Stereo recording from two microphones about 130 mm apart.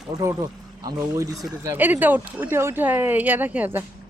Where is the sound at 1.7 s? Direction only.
15° right (ahead or behind).